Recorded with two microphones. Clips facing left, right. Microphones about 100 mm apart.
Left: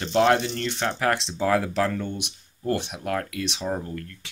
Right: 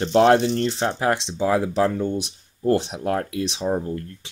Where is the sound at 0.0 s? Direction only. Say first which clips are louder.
Right 5 dB; 35° right (ahead or behind).